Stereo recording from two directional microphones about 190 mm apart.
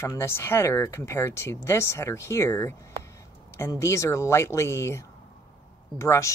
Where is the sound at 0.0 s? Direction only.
15° left (ahead or behind).